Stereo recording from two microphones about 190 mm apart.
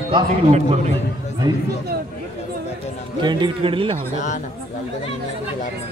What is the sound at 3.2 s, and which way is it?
Speech, 25° right (ahead or behind).